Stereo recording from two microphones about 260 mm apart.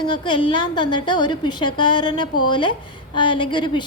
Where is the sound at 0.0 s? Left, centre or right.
Centre.